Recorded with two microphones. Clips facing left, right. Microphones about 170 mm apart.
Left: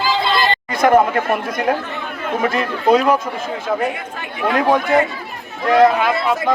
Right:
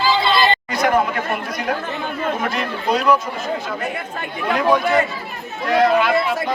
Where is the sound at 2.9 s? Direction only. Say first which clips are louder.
Left 3 dB; 45° left (ahead or behind).